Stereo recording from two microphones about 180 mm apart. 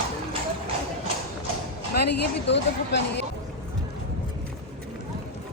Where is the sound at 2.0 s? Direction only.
70° left (ahead or behind).